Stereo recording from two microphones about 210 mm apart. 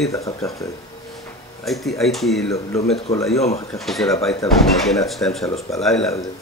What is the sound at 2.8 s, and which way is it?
Speech, 30° left (ahead or behind).